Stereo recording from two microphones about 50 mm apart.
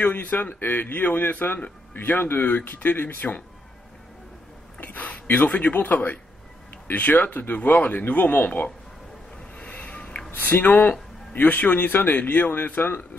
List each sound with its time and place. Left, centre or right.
0.0 s a man's voice: left
4.7 s a man's voice: left
9.6 s a sound: left
10.3 s a man's voice: left